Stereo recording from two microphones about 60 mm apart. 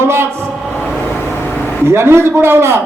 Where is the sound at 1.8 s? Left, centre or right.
Right.